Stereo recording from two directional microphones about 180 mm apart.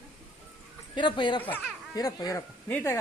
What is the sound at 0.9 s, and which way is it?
Speech, 25° left (ahead or behind).